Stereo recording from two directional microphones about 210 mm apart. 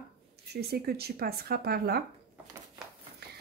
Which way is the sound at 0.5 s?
50° right (ahead or behind).